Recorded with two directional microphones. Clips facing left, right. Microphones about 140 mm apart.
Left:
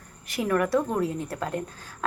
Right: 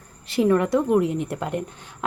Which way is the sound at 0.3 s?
25° right (ahead or behind).